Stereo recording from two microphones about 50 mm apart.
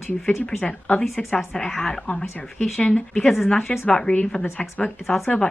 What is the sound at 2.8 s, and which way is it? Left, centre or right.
A woman's voice, left.